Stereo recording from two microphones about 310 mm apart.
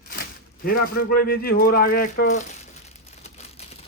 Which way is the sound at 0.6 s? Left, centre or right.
Left.